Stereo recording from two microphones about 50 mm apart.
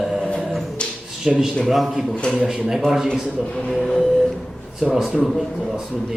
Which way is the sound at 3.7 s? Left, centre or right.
Centre.